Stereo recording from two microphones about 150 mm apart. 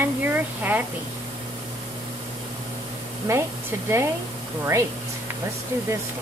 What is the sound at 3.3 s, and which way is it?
Speech, 20° right (ahead or behind).